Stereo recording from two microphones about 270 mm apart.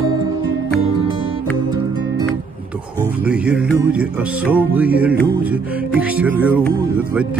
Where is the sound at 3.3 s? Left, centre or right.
Centre.